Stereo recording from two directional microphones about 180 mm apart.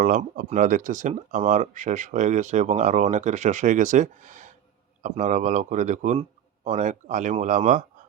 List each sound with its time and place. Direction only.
0.0 s speech: 50° right (ahead or behind)